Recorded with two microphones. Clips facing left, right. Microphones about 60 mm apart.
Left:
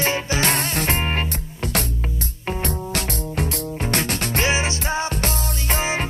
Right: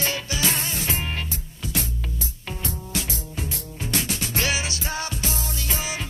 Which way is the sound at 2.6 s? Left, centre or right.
Left.